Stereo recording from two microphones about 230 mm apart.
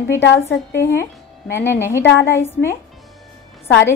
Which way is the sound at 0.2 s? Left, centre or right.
Left.